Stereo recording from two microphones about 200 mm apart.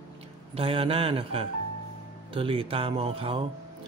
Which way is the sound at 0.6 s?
30° right (ahead or behind).